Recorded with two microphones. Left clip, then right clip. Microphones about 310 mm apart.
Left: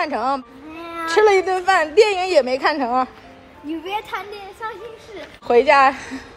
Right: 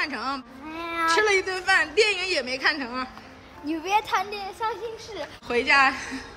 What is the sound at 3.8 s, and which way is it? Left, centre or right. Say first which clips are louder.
Speech: right 4 dB; centre.